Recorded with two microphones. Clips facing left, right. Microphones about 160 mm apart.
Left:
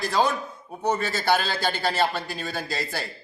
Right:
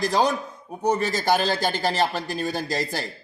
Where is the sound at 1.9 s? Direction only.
40° right (ahead or behind).